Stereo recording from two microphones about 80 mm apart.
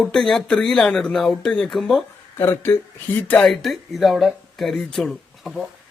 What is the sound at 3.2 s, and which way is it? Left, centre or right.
Speech, centre.